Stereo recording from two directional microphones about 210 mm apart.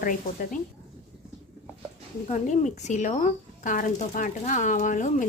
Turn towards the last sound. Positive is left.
turn(degrees=35)  # may be behind; listen again after turning